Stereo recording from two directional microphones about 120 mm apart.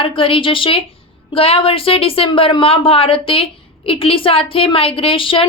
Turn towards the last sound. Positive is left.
turn(degrees=45)  # may be behind; listen again after turning